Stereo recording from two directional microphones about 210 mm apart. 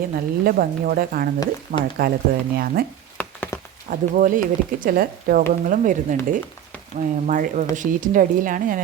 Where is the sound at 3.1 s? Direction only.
10° left (ahead or behind).